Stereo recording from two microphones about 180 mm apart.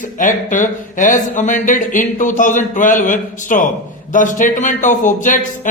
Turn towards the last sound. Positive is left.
turn(degrees=45)  # may be behind; listen again after turning